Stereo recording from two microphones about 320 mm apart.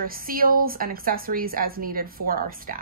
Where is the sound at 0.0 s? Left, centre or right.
Right.